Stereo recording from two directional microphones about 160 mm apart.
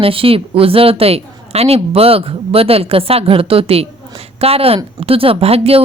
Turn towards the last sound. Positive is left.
turn(degrees=-40)  # may be behind; listen again after turning